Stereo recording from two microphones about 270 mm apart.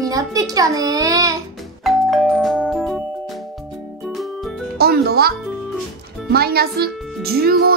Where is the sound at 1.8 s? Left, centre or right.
Centre.